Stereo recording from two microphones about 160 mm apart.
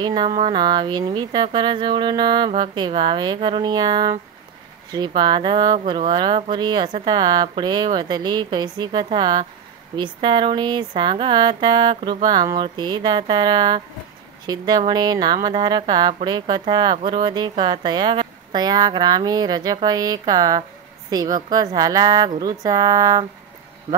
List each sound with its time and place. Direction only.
0.0 s speech: 30° right (ahead or behind)